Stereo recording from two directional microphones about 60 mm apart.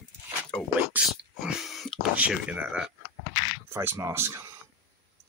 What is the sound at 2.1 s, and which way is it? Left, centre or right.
Speech, right.